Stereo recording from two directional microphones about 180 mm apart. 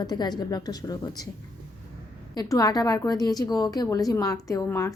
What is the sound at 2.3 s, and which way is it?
A woman's voice, 20° left (ahead or behind).